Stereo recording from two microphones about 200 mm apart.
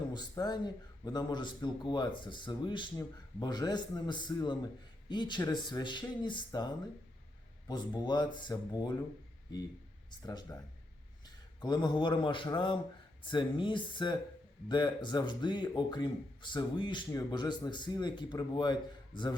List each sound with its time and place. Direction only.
0.1 s a man's voice: 20° left (ahead or behind)
7.7 s a man's voice: 20° left (ahead or behind)
10.1 s a man's voice: 20° left (ahead or behind)
11.6 s a man's voice: 20° left (ahead or behind)